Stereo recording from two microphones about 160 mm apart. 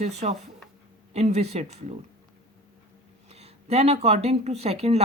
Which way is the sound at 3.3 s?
40° right (ahead or behind).